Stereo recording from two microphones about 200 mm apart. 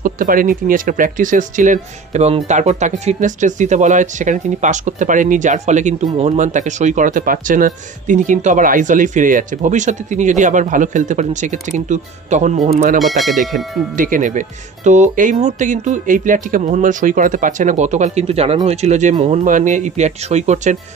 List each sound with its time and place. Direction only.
0.0 s speech: 45° right (ahead or behind)
13.0 s speech: centre (ahead or behind)
13.9 s speech: 40° right (ahead or behind)
19.4 s speech: 40° right (ahead or behind)